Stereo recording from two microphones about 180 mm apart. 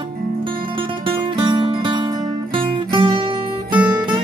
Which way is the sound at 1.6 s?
25° right (ahead or behind).